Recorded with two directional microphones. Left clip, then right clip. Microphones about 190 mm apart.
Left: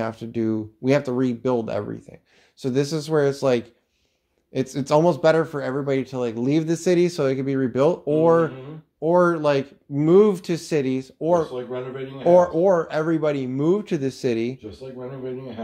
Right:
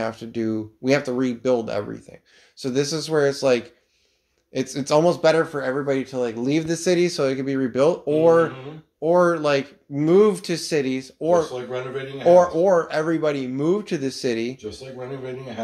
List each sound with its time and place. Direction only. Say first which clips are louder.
0.0 s speech: even; 35° left (ahead or behind)